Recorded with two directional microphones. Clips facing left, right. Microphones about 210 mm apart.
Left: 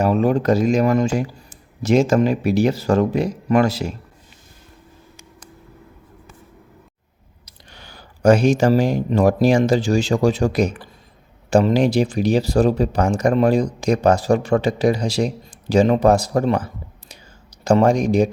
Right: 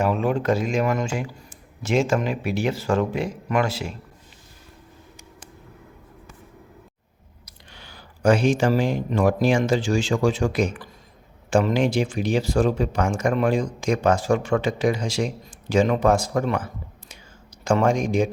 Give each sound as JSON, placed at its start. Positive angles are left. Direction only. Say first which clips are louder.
{"t": 0.0, "sound": "speech", "louder": "left 5 dB", "side_deg": 40}
{"t": 7.7, "sound": "speech", "louder": "left 3 dB", "side_deg": 45}